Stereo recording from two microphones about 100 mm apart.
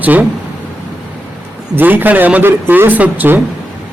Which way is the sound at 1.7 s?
20° right (ahead or behind).